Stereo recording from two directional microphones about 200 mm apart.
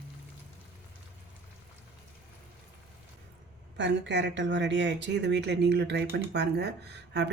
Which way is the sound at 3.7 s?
60° right (ahead or behind).